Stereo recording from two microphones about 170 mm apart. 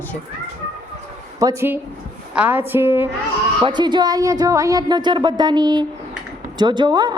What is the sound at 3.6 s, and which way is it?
A woman's voice, 25° right (ahead or behind).